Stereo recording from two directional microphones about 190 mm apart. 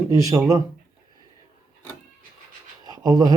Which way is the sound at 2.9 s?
20° right (ahead or behind).